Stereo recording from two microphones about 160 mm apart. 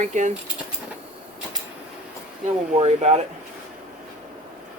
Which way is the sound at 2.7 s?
45° right (ahead or behind).